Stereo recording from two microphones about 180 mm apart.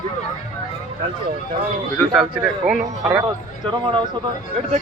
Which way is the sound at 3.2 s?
25° right (ahead or behind).